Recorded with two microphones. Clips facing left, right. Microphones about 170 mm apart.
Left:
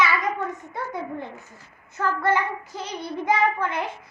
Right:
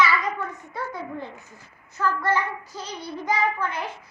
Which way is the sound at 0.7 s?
20° left (ahead or behind).